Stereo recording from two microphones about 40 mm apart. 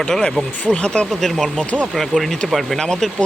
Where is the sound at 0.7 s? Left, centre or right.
Left.